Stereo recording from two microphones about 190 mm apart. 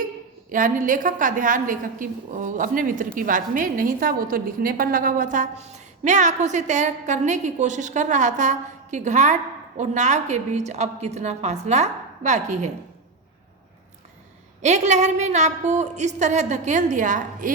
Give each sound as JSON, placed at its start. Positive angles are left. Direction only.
{"t": 0.5, "sound": "a woman's voice", "side_deg": -45}
{"t": 14.6, "sound": "a woman's voice", "side_deg": -35}